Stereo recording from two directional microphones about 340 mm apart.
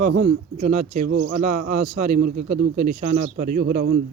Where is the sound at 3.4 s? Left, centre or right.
Right.